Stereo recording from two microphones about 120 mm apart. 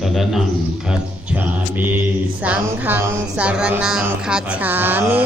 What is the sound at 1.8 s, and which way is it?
Music, 10° right (ahead or behind).